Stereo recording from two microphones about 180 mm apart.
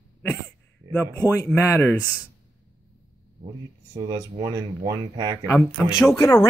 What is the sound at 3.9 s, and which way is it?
Speech, 20° right (ahead or behind).